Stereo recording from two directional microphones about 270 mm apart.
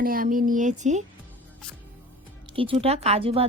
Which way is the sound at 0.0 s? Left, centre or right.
Right.